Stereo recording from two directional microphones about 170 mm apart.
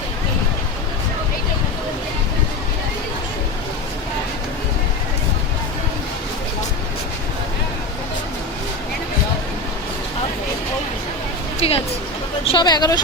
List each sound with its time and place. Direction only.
11.6 s music: 35° left (ahead or behind)
12.5 s vehicle: 25° left (ahead or behind)